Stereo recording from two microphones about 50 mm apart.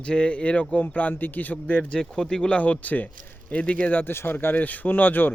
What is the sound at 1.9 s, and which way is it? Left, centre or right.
A man's voice, centre.